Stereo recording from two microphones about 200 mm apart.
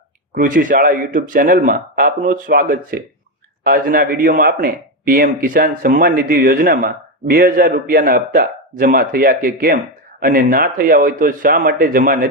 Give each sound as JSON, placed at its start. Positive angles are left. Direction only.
{"t": 0.3, "sound": "speech", "side_deg": -45}